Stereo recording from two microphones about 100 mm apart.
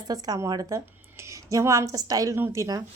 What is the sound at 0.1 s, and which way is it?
Speech, 40° right (ahead or behind).